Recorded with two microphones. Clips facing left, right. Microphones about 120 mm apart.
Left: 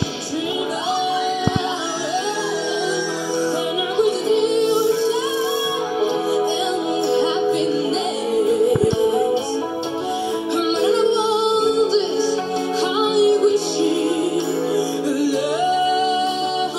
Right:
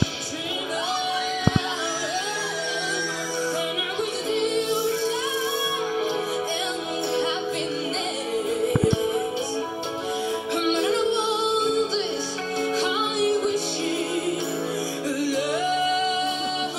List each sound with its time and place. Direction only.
10.5 s music: 25° left (ahead or behind)
12.8 s music: 25° left (ahead or behind)